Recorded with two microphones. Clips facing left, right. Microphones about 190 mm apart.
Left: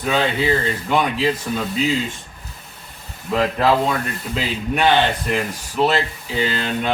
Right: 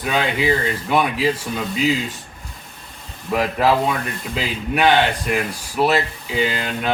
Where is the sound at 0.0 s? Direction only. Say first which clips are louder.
Left 1 dB; 10° right (ahead or behind).